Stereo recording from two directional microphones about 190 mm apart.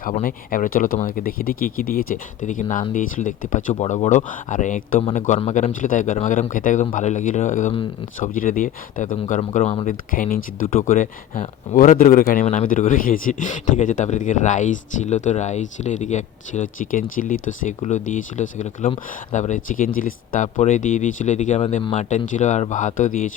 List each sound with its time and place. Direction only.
0.0 s speech: 45° left (ahead or behind)